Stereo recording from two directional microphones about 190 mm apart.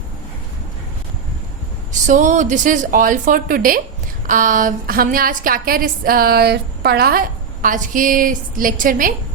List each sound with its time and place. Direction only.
1.9 s a woman's voice: 40° right (ahead or behind)